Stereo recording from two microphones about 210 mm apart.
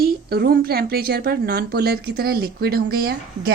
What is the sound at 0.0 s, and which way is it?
Speech, 50° right (ahead or behind).